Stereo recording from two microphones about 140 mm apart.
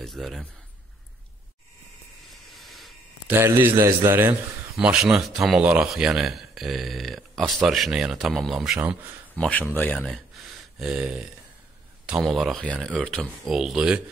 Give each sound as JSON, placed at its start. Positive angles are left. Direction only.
{"t": 0.0, "sound": "speech", "side_deg": 0}
{"t": 2.2, "sound": "hiss", "side_deg": 0}
{"t": 3.3, "sound": "a man's voice", "side_deg": -15}
{"t": 4.7, "sound": "speech", "side_deg": -5}
{"t": 9.3, "sound": "speech", "side_deg": 10}
{"t": 10.8, "sound": "a man's voice", "side_deg": -10}